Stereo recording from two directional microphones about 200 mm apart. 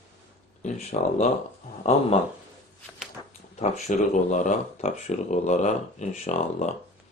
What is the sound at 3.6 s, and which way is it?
Speech, 35° left (ahead or behind).